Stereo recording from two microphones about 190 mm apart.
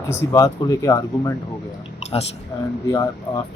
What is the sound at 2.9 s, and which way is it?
Speech, 20° left (ahead or behind).